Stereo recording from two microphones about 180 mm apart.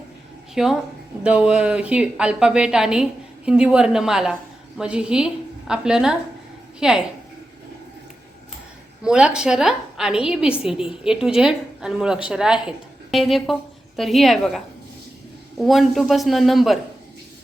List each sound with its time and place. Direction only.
0.5 s a woman's voice: centre (ahead or behind)
9.0 s a woman's voice: 5° right (ahead or behind)